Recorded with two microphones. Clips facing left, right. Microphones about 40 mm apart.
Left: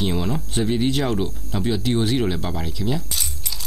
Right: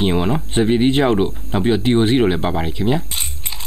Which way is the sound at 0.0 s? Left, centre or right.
Right.